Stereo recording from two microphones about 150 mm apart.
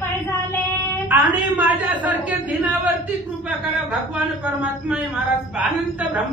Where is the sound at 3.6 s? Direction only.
10° right (ahead or behind).